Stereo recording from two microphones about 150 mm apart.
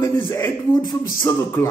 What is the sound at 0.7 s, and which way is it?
Speech, 25° left (ahead or behind).